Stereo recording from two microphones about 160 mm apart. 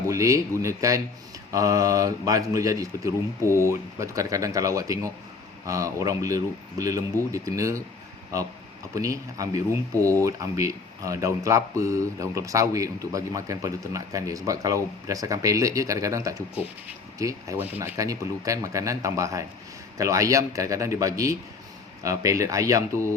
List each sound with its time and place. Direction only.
0.1 s speech: 20° right (ahead or behind)
9.0 s speech: 20° right (ahead or behind)